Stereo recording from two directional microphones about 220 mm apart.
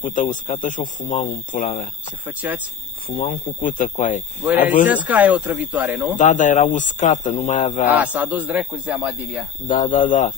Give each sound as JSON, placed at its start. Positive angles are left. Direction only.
{"t": 0.0, "sound": "speech", "side_deg": 35}
{"t": 2.2, "sound": "speech", "side_deg": -10}
{"t": 3.2, "sound": "speech", "side_deg": 40}
{"t": 4.9, "sound": "speech", "side_deg": -5}
{"t": 6.1, "sound": "speech", "side_deg": 35}
{"t": 7.9, "sound": "speech", "side_deg": -5}
{"t": 9.7, "sound": "speech", "side_deg": 35}